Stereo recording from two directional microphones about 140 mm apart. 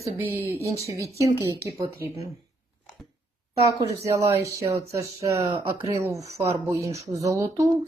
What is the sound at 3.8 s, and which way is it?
Speech, 20° right (ahead or behind).